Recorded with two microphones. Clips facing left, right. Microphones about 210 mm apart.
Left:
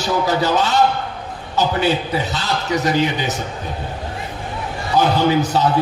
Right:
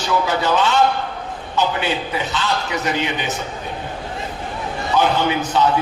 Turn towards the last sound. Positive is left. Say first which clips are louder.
# left 3 dB
turn(degrees=40)  # may be behind; listen again after turning